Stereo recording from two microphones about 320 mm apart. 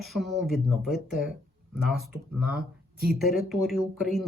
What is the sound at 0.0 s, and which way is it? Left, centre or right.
Speech, centre.